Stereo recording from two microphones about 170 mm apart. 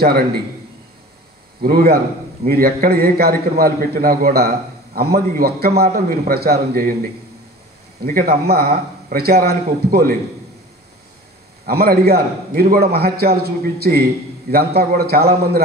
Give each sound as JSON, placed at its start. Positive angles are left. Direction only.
{"t": 0.0, "sound": "a man's voice", "side_deg": -65}
{"t": 1.6, "sound": "a man's voice", "side_deg": -65}
{"t": 8.0, "sound": "a man's voice", "side_deg": -60}
{"t": 11.6, "sound": "a man's voice", "side_deg": -65}